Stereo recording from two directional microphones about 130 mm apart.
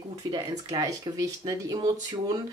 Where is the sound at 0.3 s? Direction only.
30° right (ahead or behind).